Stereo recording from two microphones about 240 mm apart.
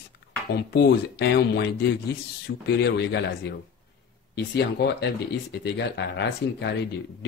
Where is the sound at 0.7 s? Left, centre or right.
Left.